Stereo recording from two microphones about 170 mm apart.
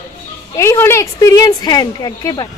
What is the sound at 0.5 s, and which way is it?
A woman's voice, 15° left (ahead or behind).